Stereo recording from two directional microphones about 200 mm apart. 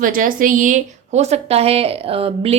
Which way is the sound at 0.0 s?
45° right (ahead or behind).